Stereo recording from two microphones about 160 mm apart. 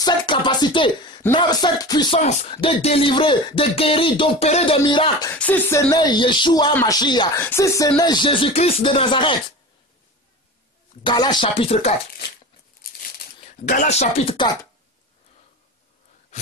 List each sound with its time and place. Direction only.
0.0 s speech: 30° left (ahead or behind)
2.1 s speech: 40° left (ahead or behind)
5.3 s speech: 10° left (ahead or behind)
7.3 s speech: 15° left (ahead or behind); by 9.3 s 30° left (ahead or behind)
11.1 s speech: 25° left (ahead or behind)
13.7 s speech: 45° left (ahead or behind); by 14.7 s 30° left (ahead or behind)